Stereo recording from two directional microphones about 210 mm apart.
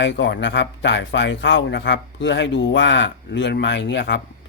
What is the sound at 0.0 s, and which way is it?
Speech, 55° left (ahead or behind).